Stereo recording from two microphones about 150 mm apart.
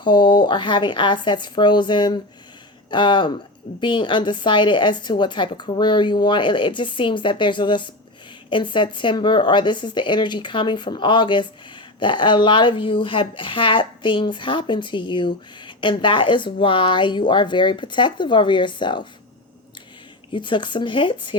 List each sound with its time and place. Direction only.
0.0 s speech: 30° left (ahead or behind)
20.3 s speech: 30° left (ahead or behind)